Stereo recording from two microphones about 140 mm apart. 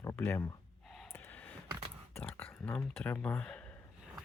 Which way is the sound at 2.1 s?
10° left (ahead or behind).